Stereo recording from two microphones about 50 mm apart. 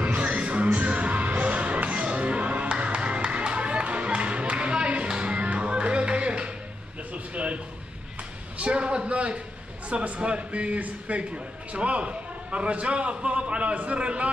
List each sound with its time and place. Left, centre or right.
0.0 s music: right
7.3 s a sound: right
9.8 s a man's voice: right